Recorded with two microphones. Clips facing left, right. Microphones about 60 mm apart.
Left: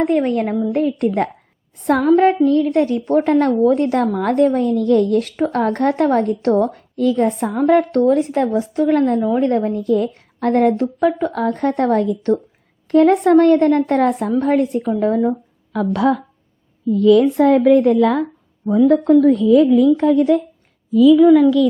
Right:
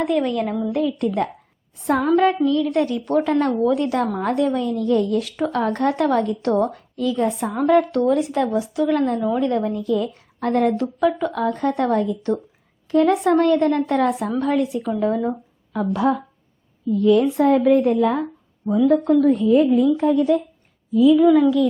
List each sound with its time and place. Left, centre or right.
0.0 s a woman's voice: left
2.1 s a woman's voice: left
3.2 s a woman's voice: left
15.7 s a woman's voice: left
17.0 s a woman's voice: left
17.3 s a woman's voice: left
18.7 s a woman's voice: left
19.3 s a woman's voice: left
19.6 s a woman's voice: left